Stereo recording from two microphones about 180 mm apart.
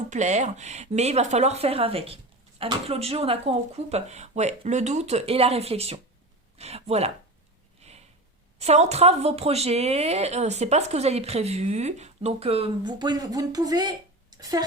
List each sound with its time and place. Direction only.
0.1 s speech: 40° right (ahead or behind)
8.5 s speech: 35° right (ahead or behind); by 14.6 s 20° right (ahead or behind)